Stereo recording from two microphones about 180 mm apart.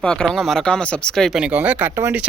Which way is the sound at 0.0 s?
5° left (ahead or behind).